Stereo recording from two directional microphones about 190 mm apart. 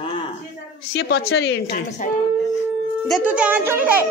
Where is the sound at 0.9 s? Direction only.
85° left.